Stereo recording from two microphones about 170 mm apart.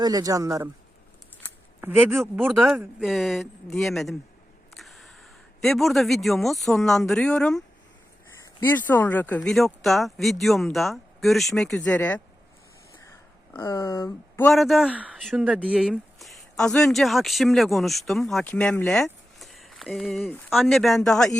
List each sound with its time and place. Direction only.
0.0 s speech: 20° right (ahead or behind)
1.8 s speech: 15° right (ahead or behind)
2.5 s speech: centre (ahead or behind)
8.6 s speech: 10° left (ahead or behind)
13.6 s speech: 15° left (ahead or behind)
14.5 s speech: centre (ahead or behind)